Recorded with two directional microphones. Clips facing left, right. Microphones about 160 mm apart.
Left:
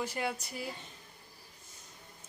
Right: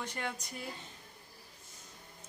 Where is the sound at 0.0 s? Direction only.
10° left (ahead or behind).